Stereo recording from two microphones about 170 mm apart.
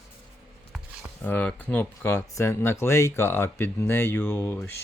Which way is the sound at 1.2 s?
10° left (ahead or behind).